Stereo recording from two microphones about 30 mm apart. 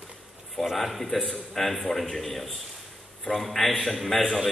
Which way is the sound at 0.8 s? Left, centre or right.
Centre.